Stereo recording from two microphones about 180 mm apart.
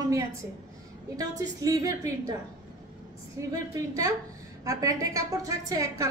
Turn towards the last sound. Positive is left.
turn(degrees=-20)  # may be behind; listen again after turning